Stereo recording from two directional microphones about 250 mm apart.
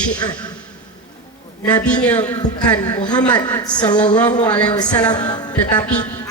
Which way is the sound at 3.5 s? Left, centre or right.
Centre.